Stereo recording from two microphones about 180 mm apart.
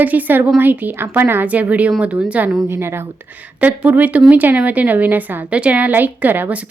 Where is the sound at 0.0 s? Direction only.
10° right (ahead or behind).